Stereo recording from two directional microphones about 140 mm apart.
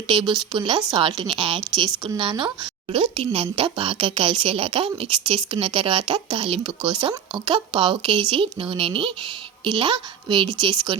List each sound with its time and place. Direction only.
0.1 s a woman's voice: 35° right (ahead or behind)